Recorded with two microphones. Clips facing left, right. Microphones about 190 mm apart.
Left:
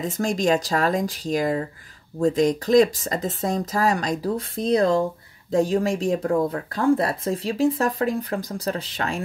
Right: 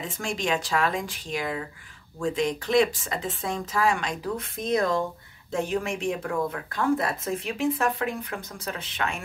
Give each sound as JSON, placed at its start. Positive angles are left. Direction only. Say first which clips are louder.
{"t": 0.0, "sound": "speech", "louder": "left 8 dB", "side_deg": 40}